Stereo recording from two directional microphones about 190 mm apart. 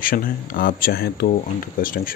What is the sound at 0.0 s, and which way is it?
Speech, 50° left (ahead or behind).